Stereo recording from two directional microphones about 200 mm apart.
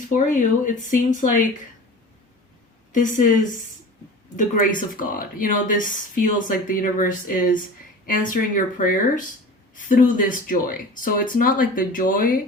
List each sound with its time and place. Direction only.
0.1 s speech: 40° left (ahead or behind)
2.9 s speech: 40° left (ahead or behind)